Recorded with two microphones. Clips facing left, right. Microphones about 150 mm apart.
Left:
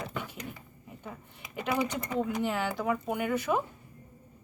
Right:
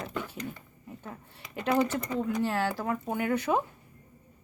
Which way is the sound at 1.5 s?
5° left (ahead or behind).